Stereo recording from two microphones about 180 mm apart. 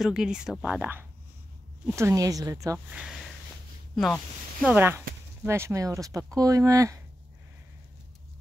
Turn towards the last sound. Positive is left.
turn(degrees=-20)  # may be behind; listen again after turning